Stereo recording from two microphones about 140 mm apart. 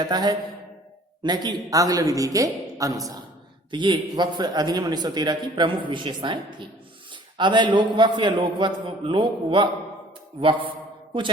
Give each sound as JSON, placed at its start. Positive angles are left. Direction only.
{"t": 0.0, "sound": "a man's voice", "side_deg": -30}